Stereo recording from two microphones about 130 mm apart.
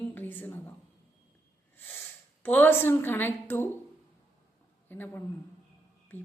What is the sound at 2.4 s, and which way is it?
A man's voice, 15° left (ahead or behind).